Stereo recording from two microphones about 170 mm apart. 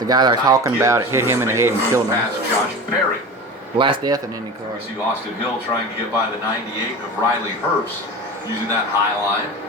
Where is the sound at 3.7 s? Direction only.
30° right (ahead or behind).